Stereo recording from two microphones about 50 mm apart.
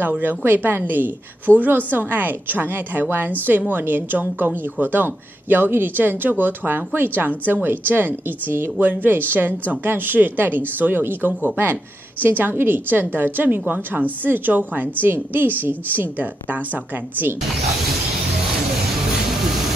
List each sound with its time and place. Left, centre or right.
0.2 s a woman's voice: right